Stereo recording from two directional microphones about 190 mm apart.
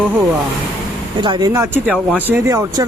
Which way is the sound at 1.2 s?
25° right (ahead or behind).